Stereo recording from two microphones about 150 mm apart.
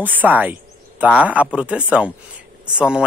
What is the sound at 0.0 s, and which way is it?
Speech, 10° right (ahead or behind).